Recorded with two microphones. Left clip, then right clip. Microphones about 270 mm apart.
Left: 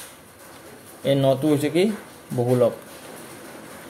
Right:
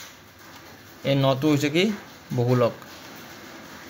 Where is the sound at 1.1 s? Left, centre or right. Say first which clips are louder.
Left 2 dB; right.